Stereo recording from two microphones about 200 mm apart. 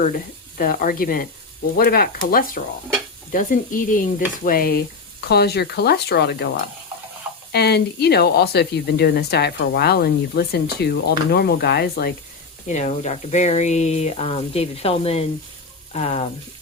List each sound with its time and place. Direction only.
0.5 s speech: 45° left (ahead or behind)
12.6 s speech: 35° left (ahead or behind)